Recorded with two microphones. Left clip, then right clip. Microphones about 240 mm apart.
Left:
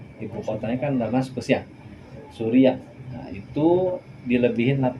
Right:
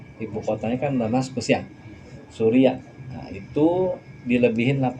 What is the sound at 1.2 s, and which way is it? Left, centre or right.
Speech, right.